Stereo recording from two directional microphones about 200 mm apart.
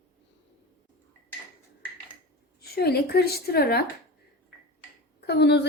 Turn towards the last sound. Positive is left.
turn(degrees=55)  # may be behind; listen again after turning